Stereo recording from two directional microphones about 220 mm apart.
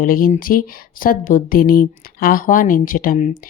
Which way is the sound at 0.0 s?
40° left (ahead or behind).